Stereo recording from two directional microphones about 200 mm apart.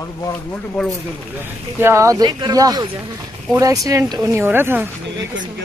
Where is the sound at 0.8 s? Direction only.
Centre (ahead or behind).